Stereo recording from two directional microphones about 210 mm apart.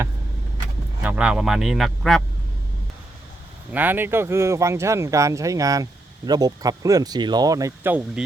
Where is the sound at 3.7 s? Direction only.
10° right (ahead or behind).